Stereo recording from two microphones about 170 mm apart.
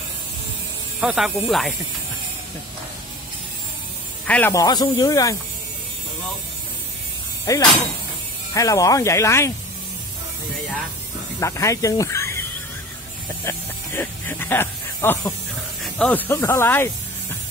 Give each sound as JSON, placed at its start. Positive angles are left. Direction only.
{"t": 1.0, "sound": "speech", "side_deg": 0}
{"t": 4.3, "sound": "speech", "side_deg": 15}
{"t": 7.5, "sound": "speech", "side_deg": 20}
{"t": 11.3, "sound": "speech", "side_deg": 20}
{"t": 13.5, "sound": "snake", "side_deg": 15}
{"t": 15.8, "sound": "speech", "side_deg": 5}